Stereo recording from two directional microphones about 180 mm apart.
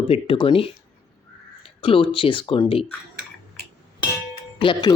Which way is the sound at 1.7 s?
30° left (ahead or behind).